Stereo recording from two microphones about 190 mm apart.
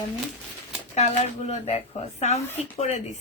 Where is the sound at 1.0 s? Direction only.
35° left (ahead or behind).